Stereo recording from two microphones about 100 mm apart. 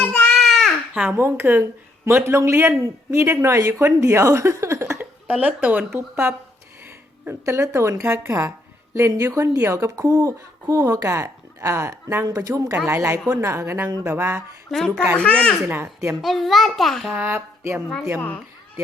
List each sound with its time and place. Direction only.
0.0 s baby cry: 10° left (ahead or behind)
1.1 s speech: 20° right (ahead or behind)
5.3 s speech: 15° right (ahead or behind)
14.7 s a child's voice: 5° left (ahead or behind)
15.6 s speech: 25° right (ahead or behind)
16.2 s a child's voice: centre (ahead or behind)
17.2 s speech: 20° right (ahead or behind)